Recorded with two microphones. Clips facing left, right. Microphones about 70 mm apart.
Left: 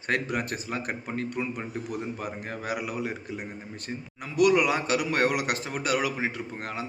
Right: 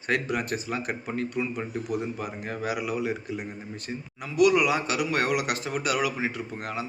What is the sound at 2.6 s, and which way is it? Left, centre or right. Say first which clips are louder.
Speech: right 2 dB; left.